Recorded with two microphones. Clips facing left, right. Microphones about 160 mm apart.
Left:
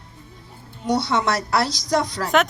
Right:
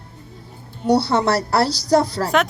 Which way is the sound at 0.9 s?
30° right (ahead or behind).